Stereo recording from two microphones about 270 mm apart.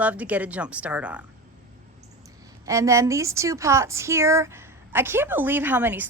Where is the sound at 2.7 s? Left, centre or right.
Centre.